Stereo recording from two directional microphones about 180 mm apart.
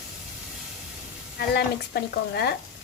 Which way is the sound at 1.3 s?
65° left (ahead or behind).